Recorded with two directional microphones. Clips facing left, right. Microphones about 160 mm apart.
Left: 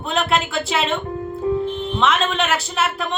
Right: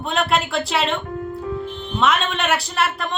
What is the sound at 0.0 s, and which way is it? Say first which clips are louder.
Speech: even; centre (ahead or behind).